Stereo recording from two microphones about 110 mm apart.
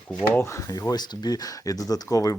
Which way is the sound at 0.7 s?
35° left (ahead or behind).